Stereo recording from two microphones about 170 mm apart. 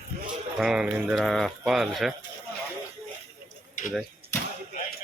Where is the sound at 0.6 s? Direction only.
5° right (ahead or behind).